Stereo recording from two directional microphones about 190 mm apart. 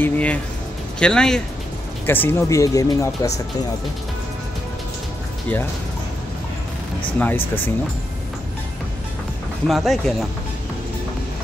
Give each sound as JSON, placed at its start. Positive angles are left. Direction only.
{"t": 0.0, "sound": "speech", "side_deg": 10}
{"t": 7.2, "sound": "speech", "side_deg": 10}
{"t": 9.7, "sound": "speech", "side_deg": 0}